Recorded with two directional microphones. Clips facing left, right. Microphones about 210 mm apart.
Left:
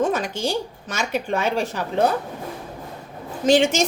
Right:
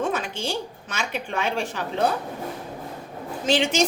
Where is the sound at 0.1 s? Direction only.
40° left (ahead or behind).